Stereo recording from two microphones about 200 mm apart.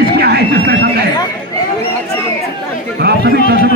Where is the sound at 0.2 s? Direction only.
55° right (ahead or behind).